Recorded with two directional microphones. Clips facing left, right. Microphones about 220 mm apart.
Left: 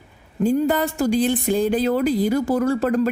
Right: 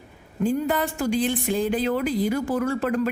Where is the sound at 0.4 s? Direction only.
40° left (ahead or behind).